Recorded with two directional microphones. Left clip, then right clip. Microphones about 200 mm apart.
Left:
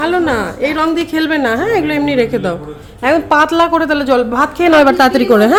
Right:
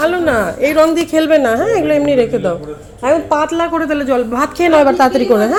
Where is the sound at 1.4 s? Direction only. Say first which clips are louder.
Right 2 dB; 10° left (ahead or behind).